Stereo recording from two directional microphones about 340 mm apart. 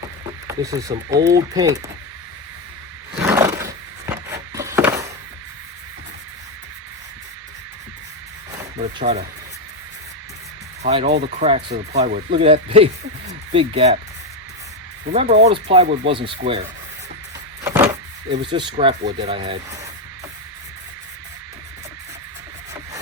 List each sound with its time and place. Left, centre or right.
0.4 s speech: centre
3.2 s a sound: centre
8.8 s a sound: centre
10.8 s speech: centre
15.1 s speech: centre
17.6 s vehicle: centre
18.4 s speech: centre